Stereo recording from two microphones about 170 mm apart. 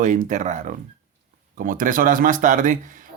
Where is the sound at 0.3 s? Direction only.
45° right (ahead or behind).